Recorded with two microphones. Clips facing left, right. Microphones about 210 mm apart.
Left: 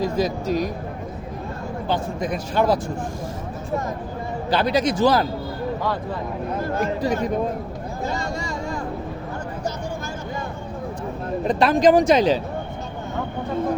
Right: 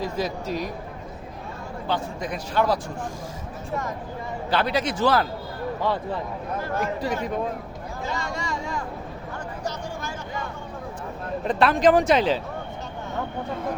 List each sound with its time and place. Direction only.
0.0 s speech: 40° left (ahead or behind)
1.9 s speech: 50° left (ahead or behind)
4.4 s speech: 40° left (ahead or behind)
6.7 s speech: 45° left (ahead or behind)
8.0 s vehicle: 40° left (ahead or behind)
11.4 s speech: 40° left (ahead or behind)